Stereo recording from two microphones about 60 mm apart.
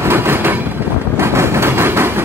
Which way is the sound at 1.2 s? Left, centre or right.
Right.